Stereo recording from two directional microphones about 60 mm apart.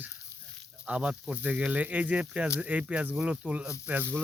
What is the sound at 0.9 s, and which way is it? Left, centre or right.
Speech, centre.